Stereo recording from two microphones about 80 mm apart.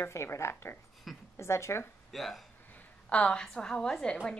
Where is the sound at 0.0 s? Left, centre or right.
Left.